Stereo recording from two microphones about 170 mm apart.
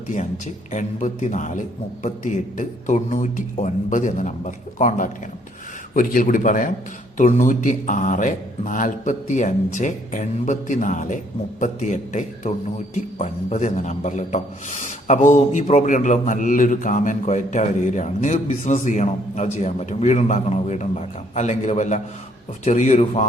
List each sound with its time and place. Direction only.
0.1 s a man's voice: 45° left (ahead or behind)